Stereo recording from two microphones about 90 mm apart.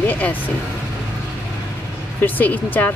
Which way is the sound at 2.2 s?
20° left (ahead or behind).